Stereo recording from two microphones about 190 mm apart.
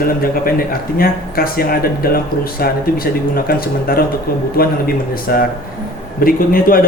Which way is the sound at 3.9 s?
50° left (ahead or behind).